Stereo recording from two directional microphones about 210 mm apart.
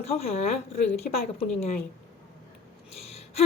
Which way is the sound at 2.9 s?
30° left (ahead or behind).